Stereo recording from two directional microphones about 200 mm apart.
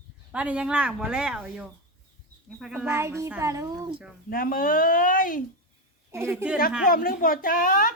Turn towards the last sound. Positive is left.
turn(degrees=45)  # may be behind; listen again after turning